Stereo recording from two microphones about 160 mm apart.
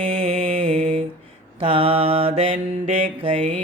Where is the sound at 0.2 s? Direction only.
35° right (ahead or behind).